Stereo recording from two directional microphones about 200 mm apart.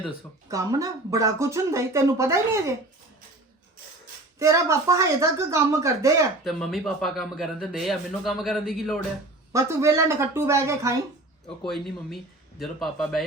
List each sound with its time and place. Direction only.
0.4 s speech: 15° right (ahead or behind)
4.4 s speech: 15° right (ahead or behind)
6.4 s a man's voice: centre (ahead or behind)
9.5 s speech: 15° right (ahead or behind)
11.6 s a man's voice: centre (ahead or behind)